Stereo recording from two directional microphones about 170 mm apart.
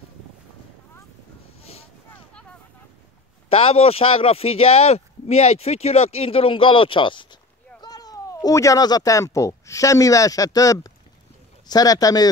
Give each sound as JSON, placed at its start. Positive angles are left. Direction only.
{"t": 1.6, "sound": "boat", "side_deg": 35}
{"t": 3.4, "sound": "speech", "side_deg": 35}